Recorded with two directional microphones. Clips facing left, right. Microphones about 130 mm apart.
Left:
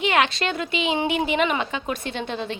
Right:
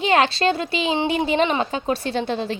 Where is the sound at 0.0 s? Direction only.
35° right (ahead or behind).